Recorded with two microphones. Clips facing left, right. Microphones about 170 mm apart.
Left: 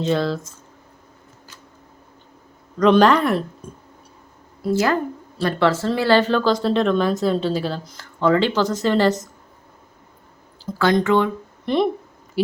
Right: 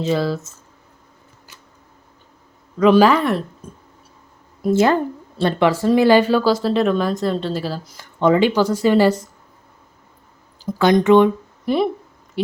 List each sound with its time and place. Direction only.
0.0 s speech: 5° right (ahead or behind)
2.7 s speech: 5° right (ahead or behind)
4.6 s speech: 25° right (ahead or behind)
5.6 s speech: 15° right (ahead or behind)
8.0 s speech: 15° right (ahead or behind)
10.7 s speech: 15° right (ahead or behind)
11.6 s speech: 5° right (ahead or behind)